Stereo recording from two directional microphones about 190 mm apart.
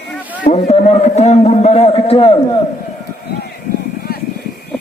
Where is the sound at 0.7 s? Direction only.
35° left (ahead or behind).